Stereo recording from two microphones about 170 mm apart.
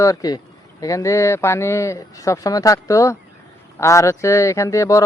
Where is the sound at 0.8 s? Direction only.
20° left (ahead or behind).